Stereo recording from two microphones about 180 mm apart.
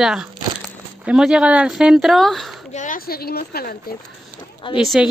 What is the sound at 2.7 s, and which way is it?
A woman's voice, 45° left (ahead or behind).